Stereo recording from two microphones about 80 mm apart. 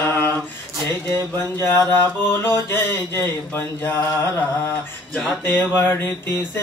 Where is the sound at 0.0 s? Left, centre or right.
Left.